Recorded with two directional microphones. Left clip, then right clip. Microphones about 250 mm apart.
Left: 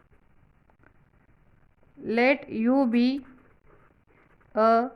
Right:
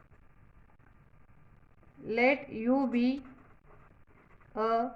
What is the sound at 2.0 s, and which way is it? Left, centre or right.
Speech, left.